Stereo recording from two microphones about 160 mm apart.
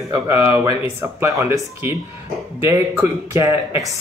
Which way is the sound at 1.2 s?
15° right (ahead or behind).